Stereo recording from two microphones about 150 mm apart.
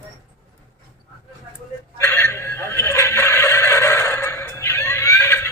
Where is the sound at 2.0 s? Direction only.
15° left (ahead or behind).